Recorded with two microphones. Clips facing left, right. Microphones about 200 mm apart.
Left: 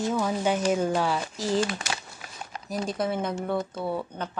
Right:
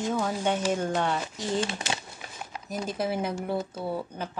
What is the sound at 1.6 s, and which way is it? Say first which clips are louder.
Speech: left 2 dB; 25° right (ahead or behind).